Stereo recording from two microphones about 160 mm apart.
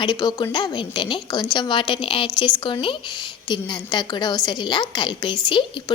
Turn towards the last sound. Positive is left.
turn(degrees=30)  # may be behind; listen again after turning